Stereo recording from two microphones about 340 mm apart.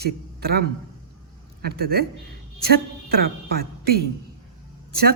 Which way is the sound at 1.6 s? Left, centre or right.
Right.